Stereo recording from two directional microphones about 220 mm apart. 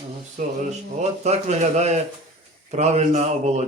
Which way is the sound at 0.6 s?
30° right (ahead or behind).